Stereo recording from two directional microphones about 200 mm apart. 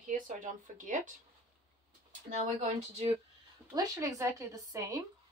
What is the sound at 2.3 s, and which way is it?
Speech, 35° right (ahead or behind).